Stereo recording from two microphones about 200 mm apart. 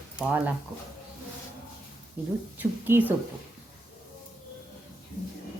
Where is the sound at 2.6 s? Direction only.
10° right (ahead or behind).